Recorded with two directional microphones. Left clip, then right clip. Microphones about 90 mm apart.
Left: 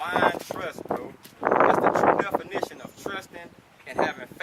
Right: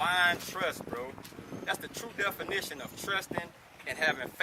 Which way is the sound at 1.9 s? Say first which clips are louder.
Left 14 dB; 20° right (ahead or behind).